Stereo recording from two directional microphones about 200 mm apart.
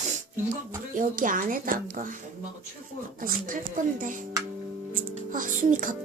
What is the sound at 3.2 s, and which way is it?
A woman's voice, 45° right (ahead or behind).